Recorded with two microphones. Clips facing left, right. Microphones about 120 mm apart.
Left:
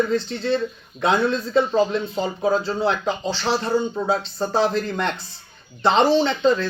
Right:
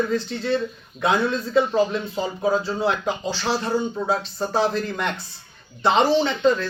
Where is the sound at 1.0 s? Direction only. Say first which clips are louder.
Left 1 dB; 10° right (ahead or behind).